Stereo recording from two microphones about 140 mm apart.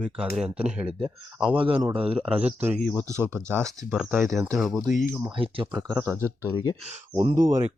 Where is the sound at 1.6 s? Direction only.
40° right (ahead or behind).